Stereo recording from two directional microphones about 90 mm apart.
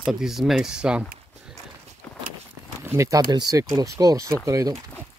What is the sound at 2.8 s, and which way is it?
Speech, 30° right (ahead or behind).